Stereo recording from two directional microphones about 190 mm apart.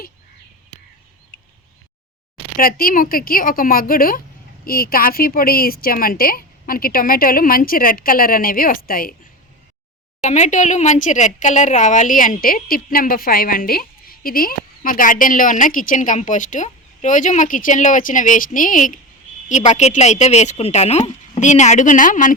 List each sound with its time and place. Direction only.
2.6 s speech: 50° left (ahead or behind)
10.2 s speech: 40° left (ahead or behind)